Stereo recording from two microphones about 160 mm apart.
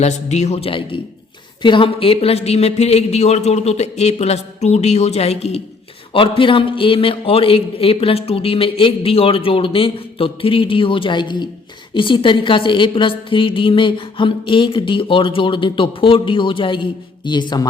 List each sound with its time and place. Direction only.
0.0 s a woman's voice: 45° left (ahead or behind); by 17.7 s 25° left (ahead or behind)